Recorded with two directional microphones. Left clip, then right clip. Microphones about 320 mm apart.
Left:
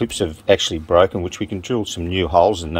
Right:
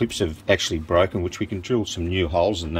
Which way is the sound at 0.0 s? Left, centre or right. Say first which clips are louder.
Left 3 dB; centre.